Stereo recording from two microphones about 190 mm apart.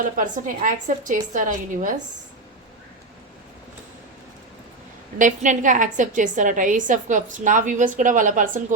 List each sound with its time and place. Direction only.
0.2 s a woman's voice: 45° right (ahead or behind)
5.1 s a woman's voice: 40° right (ahead or behind)